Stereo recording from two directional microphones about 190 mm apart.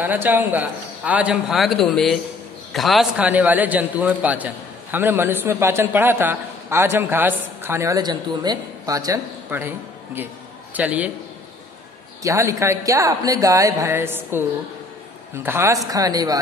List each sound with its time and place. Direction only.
0.0 s a man's voice: 10° right (ahead or behind)
12.2 s a man's voice: 15° right (ahead or behind)